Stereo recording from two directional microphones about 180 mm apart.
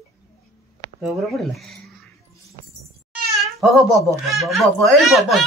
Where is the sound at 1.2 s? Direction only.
Centre (ahead or behind).